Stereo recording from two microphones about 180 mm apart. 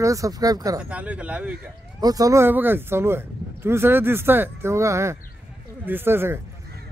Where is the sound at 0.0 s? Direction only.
20° right (ahead or behind).